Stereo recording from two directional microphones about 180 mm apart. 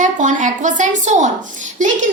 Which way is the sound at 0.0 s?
45° right (ahead or behind).